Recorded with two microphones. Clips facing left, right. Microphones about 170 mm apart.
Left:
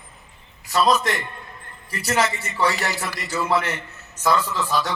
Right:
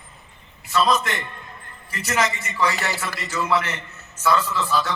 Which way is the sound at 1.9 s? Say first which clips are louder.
Left 2 dB; 35° left (ahead or behind).